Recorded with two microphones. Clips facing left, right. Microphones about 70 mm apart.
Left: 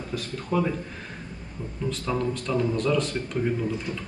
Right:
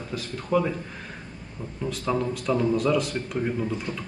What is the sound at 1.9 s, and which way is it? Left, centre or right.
A man's voice, centre.